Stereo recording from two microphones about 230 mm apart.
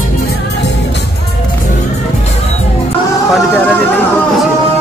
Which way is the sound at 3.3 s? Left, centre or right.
Centre.